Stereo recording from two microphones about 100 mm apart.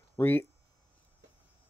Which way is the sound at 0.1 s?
20° left (ahead or behind).